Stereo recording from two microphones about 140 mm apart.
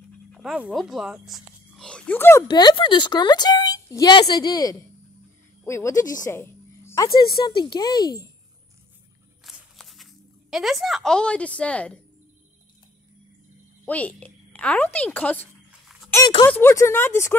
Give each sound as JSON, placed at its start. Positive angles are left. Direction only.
{"t": 0.3, "sound": "speech", "side_deg": -5}
{"t": 2.4, "sound": "a woman's voice", "side_deg": 35}
{"t": 7.4, "sound": "a child's voice", "side_deg": 30}
{"t": 9.4, "sound": "a sound", "side_deg": 0}
{"t": 10.5, "sound": "a woman's voice", "side_deg": 0}
{"t": 13.8, "sound": "speech", "side_deg": 10}
{"t": 16.4, "sound": "a woman's voice", "side_deg": 15}